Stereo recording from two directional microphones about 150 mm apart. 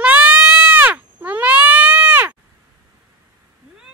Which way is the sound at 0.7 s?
10° right (ahead or behind).